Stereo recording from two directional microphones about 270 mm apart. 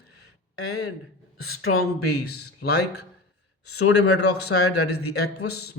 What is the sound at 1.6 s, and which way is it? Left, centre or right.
Speech, left.